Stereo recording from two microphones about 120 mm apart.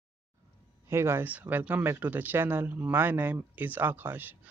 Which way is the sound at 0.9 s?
20° right (ahead or behind).